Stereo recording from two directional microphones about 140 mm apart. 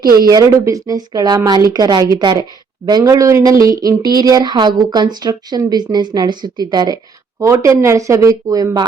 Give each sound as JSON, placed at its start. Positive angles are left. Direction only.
{"t": 0.0, "sound": "a woman's voice", "side_deg": -30}